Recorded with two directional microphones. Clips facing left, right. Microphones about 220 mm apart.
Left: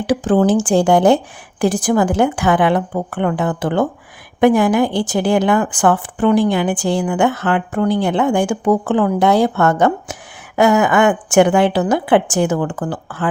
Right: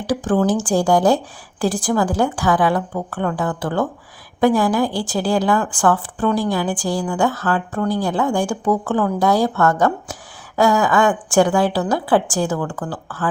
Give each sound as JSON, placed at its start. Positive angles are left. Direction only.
{"t": 0.1, "sound": "speech", "side_deg": 25}